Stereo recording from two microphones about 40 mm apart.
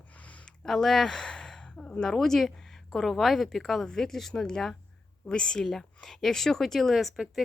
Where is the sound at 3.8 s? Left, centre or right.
Centre.